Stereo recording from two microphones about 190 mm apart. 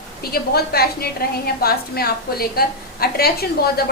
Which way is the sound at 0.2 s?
55° left (ahead or behind).